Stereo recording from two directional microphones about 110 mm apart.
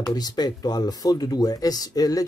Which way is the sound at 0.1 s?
35° left (ahead or behind).